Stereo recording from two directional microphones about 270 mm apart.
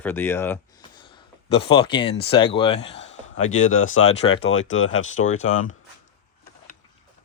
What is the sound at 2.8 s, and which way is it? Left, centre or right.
Speech, left.